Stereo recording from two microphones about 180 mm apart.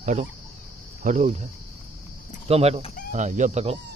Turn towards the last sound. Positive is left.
turn(degrees=-35)  # may be behind; listen again after turning